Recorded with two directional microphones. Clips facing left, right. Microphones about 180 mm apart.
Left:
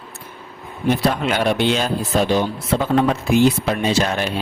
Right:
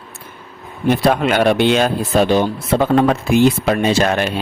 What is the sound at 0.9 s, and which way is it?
Speech, 60° right (ahead or behind).